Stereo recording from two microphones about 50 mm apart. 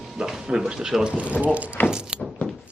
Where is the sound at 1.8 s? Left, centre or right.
Left.